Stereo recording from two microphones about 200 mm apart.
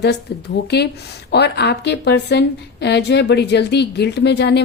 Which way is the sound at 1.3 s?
55° left (ahead or behind).